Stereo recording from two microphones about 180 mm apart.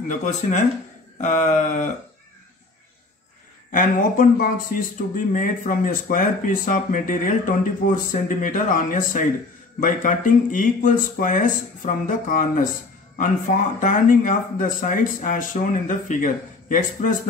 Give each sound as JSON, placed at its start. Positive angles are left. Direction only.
{"t": 0.1, "sound": "a sound", "side_deg": 40}
{"t": 3.7, "sound": "speech", "side_deg": 50}
{"t": 13.7, "sound": "speech", "side_deg": 45}